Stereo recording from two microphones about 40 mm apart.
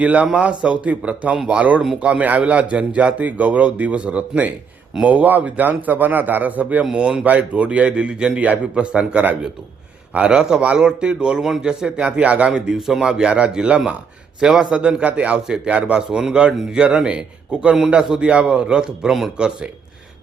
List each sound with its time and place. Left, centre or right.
0.0 s a man's voice: right
6.9 s a man's voice: centre
7.3 s a man's voice: right
10.2 s a man's voice: right
12.5 s a man's voice: centre
16.0 s a man's voice: centre